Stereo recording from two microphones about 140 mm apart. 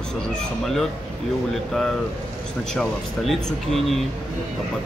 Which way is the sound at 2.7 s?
5° left (ahead or behind).